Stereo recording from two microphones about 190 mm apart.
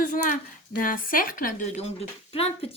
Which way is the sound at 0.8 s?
45° left (ahead or behind).